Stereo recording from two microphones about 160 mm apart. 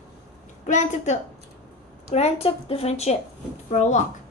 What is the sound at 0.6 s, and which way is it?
A woman's voice, 50° left (ahead or behind).